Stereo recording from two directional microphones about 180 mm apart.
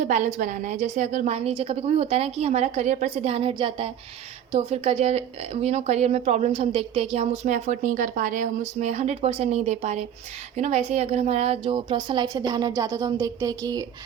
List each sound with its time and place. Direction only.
0.0 s a woman's voice: 40° right (ahead or behind); by 13.8 s 20° right (ahead or behind)